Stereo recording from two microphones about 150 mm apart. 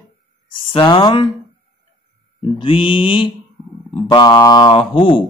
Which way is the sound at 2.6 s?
35° left (ahead or behind).